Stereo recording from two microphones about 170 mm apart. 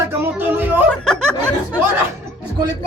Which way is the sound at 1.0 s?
5° left (ahead or behind).